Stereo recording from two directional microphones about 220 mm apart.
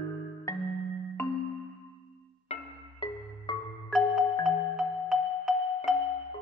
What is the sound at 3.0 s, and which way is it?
Music, 25° left (ahead or behind).